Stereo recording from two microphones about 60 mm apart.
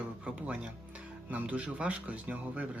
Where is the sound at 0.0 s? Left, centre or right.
Right.